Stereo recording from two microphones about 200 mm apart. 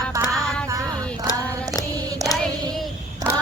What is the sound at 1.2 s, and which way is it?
Female singing, 20° left (ahead or behind).